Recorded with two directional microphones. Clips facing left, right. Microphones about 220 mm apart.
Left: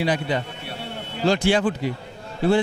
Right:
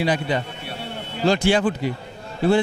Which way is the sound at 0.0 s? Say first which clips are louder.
Right 1 dB; 15° right (ahead or behind).